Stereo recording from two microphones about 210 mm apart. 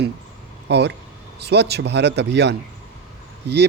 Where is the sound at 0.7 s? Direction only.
55° right (ahead or behind).